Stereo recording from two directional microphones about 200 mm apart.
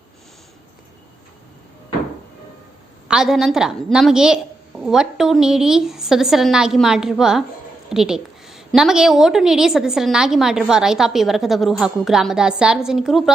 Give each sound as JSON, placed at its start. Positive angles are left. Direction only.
{"t": 3.1, "sound": "a woman's voice", "side_deg": -5}